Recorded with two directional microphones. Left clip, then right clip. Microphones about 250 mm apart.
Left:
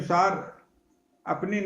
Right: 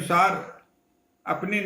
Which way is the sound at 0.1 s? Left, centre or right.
Centre.